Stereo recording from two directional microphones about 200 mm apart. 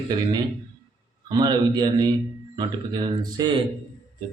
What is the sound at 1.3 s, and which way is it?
Speech, 20° right (ahead or behind).